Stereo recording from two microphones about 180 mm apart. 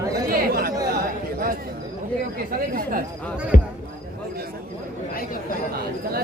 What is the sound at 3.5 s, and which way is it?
Speech, 50° left (ahead or behind).